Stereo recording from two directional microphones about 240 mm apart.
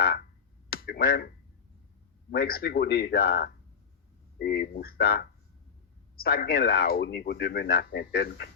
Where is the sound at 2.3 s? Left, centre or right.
Left.